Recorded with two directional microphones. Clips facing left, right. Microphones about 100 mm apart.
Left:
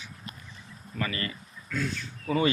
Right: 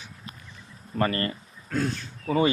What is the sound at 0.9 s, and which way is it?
Speech, 45° right (ahead or behind).